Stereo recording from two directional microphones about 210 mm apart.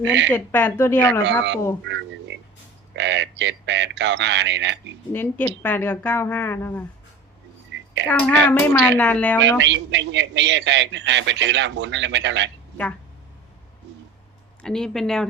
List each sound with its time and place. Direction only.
0.0 s a man's voice: 60° right (ahead or behind)
0.3 s a woman's voice: 10° left (ahead or behind)
1.2 s a man's voice: 55° right (ahead or behind)
1.8 s frog: 60° right (ahead or behind)
2.9 s a man's voice: 60° right (ahead or behind)
5.1 s a woman's voice: 10° left (ahead or behind)
8.0 s a woman's voice: 5° left (ahead or behind)
9.4 s a man's voice: 60° right (ahead or behind)
14.6 s speech: 5° left (ahead or behind)